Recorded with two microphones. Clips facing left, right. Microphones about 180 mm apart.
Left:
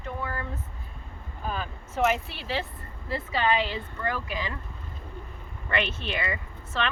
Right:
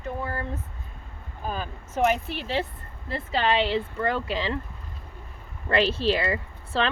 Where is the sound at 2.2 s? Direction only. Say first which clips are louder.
Right 4 dB; 50° right (ahead or behind).